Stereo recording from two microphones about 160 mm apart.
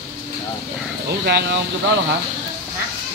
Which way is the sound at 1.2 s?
90° right.